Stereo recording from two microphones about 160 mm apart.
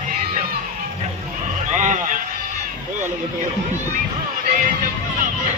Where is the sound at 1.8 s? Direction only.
55° right (ahead or behind).